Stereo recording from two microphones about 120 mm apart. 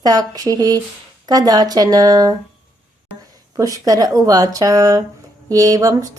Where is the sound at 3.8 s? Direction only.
30° right (ahead or behind).